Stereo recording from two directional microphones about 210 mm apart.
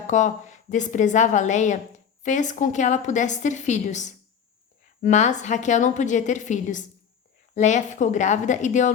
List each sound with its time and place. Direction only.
0.1 s a woman's voice: 35° left (ahead or behind)